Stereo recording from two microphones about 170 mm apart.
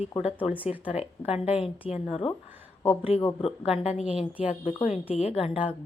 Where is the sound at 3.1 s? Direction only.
10° right (ahead or behind).